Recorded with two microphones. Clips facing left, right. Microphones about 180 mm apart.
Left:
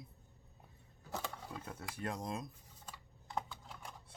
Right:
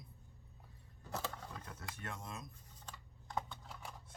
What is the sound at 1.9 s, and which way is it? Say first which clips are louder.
Speech: left 9 dB; 35° left (ahead or behind).